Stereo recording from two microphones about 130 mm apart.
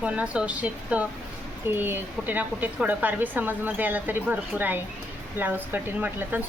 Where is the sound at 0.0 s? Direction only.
10° right (ahead or behind).